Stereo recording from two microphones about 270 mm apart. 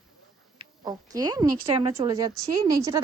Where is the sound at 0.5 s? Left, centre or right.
Centre.